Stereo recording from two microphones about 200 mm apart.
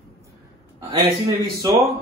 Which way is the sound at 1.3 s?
15° right (ahead or behind).